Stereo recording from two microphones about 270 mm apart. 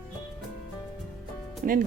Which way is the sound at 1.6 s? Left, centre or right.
Right.